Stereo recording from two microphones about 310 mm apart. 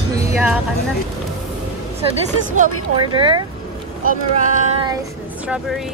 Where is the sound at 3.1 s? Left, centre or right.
Centre.